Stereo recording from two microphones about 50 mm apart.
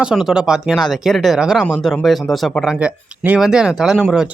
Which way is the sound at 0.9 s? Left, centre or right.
Centre.